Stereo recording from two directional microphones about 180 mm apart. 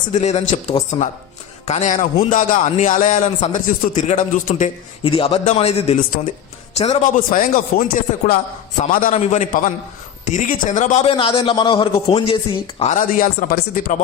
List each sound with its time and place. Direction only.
0.1 s a man's voice: 40° left (ahead or behind)
5.0 s a man's voice: 30° left (ahead or behind); by 9.1 s 50° left (ahead or behind)
9.1 s a man's voice: 40° left (ahead or behind)
11.0 s a man's voice: 30° left (ahead or behind)
12.8 s a man's voice: 45° left (ahead or behind)